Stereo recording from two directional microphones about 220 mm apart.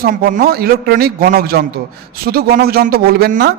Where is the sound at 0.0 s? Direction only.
40° right (ahead or behind).